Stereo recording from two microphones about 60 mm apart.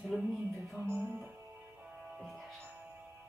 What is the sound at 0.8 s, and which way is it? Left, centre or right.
Music, right.